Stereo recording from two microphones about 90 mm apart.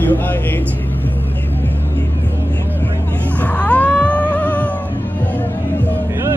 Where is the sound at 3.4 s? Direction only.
15° left (ahead or behind).